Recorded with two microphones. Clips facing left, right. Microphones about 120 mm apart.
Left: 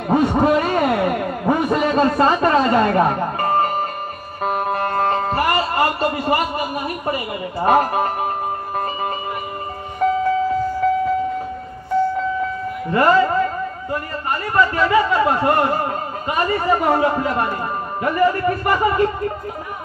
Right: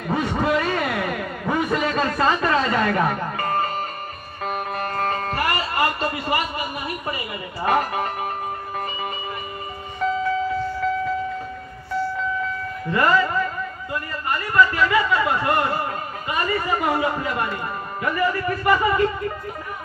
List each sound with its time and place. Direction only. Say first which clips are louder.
0.1 s a sound: left 6 dB; 40° left (ahead or behind)
2.0 s a woman's voice: left 6 dB; 40° left (ahead or behind)
3.3 s music: left 6 dB; 25° left (ahead or behind)
5.1 s speech: left 5 dB; 25° left (ahead or behind)
9.9 s music: left 5 dB; 45° left (ahead or behind)
11.9 s a sound: left 7 dB; 50° left (ahead or behind)
12.9 s a man's voice: left 4 dB; 30° left (ahead or behind)